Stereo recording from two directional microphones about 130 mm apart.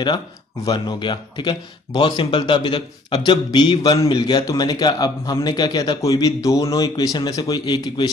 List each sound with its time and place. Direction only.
0.7 s a man's voice: 35° left (ahead or behind)